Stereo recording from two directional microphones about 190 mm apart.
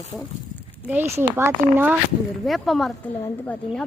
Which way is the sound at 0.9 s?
10° right (ahead or behind).